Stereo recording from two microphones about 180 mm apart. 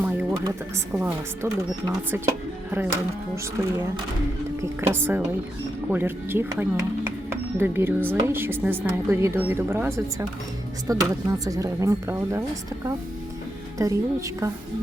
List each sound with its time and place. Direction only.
0.0 s a sound: 10° right (ahead or behind)
0.9 s speech: 15° right (ahead or behind)
2.6 s speech: 10° right (ahead or behind)
4.6 s speech: 15° right (ahead or behind)
13.7 s speech: 20° right (ahead or behind)